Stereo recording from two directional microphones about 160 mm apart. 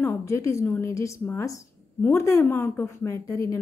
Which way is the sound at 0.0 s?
15° left (ahead or behind).